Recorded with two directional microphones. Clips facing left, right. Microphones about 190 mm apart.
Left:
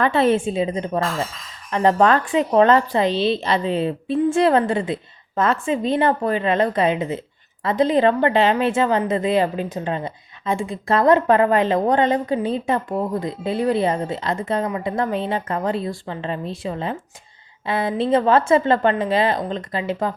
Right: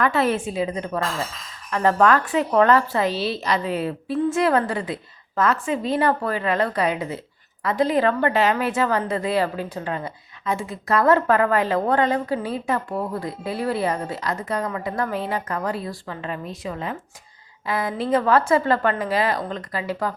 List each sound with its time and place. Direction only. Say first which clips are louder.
0.0 s a woman's voice: left 4 dB; 25° left (ahead or behind)